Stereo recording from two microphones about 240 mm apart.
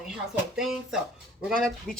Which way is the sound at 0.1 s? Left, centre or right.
Centre.